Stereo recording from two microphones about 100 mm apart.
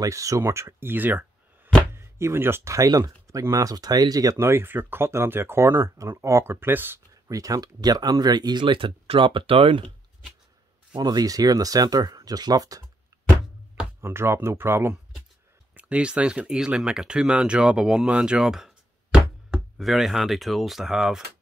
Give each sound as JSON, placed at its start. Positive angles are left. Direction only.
{"t": 0.0, "sound": "speech", "side_deg": -35}
{"t": 7.2, "sound": "speech", "side_deg": -35}
{"t": 11.0, "sound": "speech", "side_deg": -40}
{"t": 14.0, "sound": "speech", "side_deg": -25}
{"t": 15.7, "sound": "speech", "side_deg": -15}